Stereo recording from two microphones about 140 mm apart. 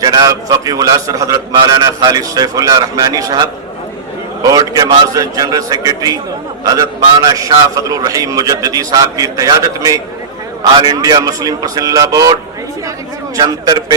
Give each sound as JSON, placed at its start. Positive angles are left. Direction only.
{"t": 0.0, "sound": "a man's voice", "side_deg": -30}
{"t": 5.1, "sound": "a man's voice", "side_deg": -25}